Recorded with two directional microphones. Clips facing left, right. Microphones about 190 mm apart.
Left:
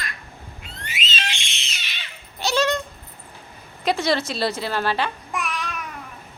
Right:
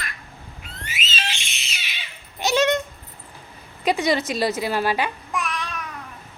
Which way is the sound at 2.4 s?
20° right (ahead or behind).